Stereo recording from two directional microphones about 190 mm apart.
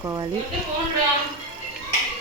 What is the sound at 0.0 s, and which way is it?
Speech, 15° right (ahead or behind).